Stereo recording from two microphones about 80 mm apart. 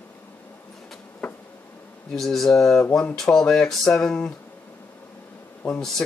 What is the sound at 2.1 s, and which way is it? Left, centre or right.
Speech, centre.